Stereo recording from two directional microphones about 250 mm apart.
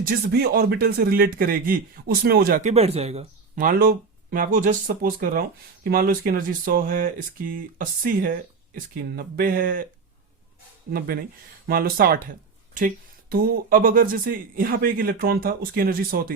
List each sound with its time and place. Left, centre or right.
0.0 s speech: right
10.9 s speech: right